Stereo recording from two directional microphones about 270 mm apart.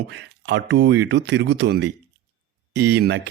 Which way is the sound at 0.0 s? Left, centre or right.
Right.